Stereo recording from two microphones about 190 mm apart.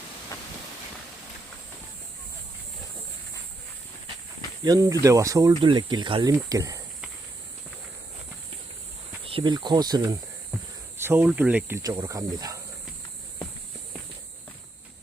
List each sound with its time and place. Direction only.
4.6 s speech: 20° right (ahead or behind)
9.2 s speech: 25° right (ahead or behind)
10.9 s snake: 10° right (ahead or behind)
11.3 s speech: 5° right (ahead or behind)
11.8 s speech: 20° right (ahead or behind)